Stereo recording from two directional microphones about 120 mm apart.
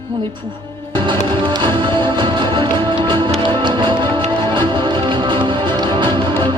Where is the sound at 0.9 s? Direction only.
40° right (ahead or behind).